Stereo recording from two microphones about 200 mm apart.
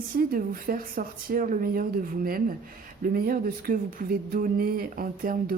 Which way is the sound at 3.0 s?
45° right (ahead or behind).